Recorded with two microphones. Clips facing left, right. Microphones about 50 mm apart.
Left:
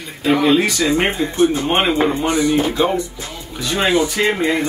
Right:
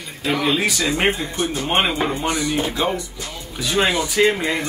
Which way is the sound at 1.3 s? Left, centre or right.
Centre.